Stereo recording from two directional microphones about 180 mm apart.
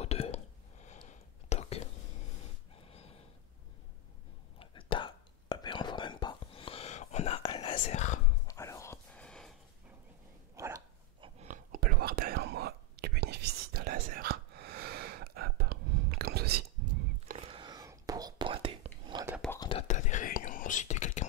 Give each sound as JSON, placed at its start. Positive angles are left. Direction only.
{"t": 0.0, "sound": "whispering", "side_deg": 35}
{"t": 2.7, "sound": "snort", "side_deg": 35}
{"t": 4.6, "sound": "whispering", "side_deg": 30}
{"t": 8.5, "sound": "whispering", "side_deg": 15}
{"t": 10.5, "sound": "dog", "side_deg": -15}
{"t": 11.1, "sound": "a sound", "side_deg": -30}
{"t": 11.4, "sound": "whispering", "side_deg": -50}
{"t": 17.4, "sound": "whispering", "side_deg": -30}
{"t": 19.7, "sound": "whispering", "side_deg": 45}